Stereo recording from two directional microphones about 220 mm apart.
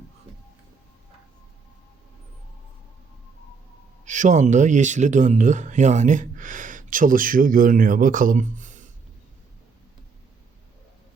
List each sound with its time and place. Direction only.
4.0 s speech: 35° right (ahead or behind)